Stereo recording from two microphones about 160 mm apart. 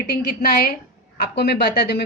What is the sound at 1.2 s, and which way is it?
Speech, 90° left.